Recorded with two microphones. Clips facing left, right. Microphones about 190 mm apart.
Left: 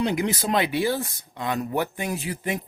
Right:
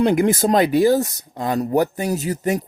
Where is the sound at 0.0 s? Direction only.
50° right (ahead or behind).